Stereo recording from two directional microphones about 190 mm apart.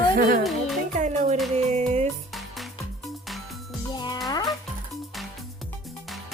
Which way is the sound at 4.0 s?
20° left (ahead or behind).